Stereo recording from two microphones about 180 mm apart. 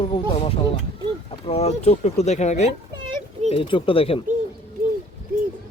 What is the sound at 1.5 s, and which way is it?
Speech, 35° left (ahead or behind).